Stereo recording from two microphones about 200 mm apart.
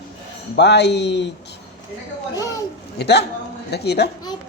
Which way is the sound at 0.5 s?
60° left (ahead or behind).